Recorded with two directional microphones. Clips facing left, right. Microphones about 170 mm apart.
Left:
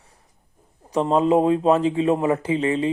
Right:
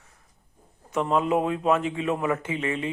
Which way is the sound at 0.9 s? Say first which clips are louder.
Left 5 dB; 30° left (ahead or behind).